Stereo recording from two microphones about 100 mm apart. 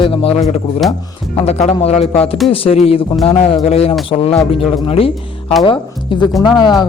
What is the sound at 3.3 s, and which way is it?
A man's voice, 90° left.